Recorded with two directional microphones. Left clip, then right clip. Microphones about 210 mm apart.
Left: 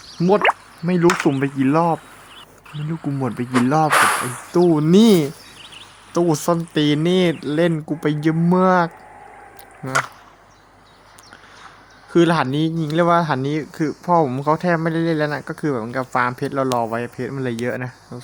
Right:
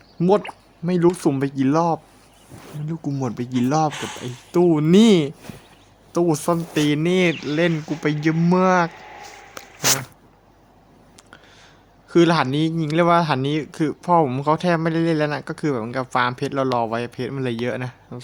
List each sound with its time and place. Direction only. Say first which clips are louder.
0.2 s speech: left 4 dB; centre (ahead or behind)
3.0 s speech: left 2 dB; 5° left (ahead or behind)
3.8 s speech: left 11 dB; 45° left (ahead or behind)
4.7 s speech: left 1 dB; centre (ahead or behind)
8.9 s a sound: right 2 dB; 45° left (ahead or behind)
12.1 s speech: even; 5° left (ahead or behind)